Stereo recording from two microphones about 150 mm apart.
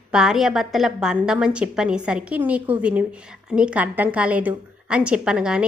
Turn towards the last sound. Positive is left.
turn(degrees=-5)  # may be behind; listen again after turning